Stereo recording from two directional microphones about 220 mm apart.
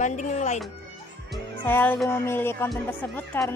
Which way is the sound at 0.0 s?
35° left (ahead or behind).